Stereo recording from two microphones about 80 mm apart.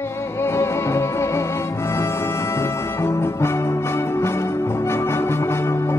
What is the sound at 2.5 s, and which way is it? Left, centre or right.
Music, left.